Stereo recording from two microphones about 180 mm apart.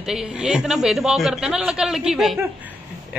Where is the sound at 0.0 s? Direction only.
5° right (ahead or behind).